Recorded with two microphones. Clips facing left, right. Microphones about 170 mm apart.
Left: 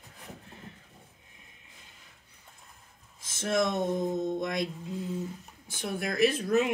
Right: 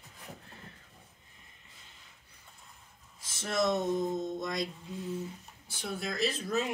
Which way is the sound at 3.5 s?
55° left (ahead or behind).